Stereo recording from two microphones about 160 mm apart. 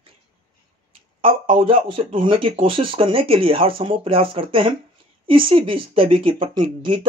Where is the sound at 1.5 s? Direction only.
35° right (ahead or behind).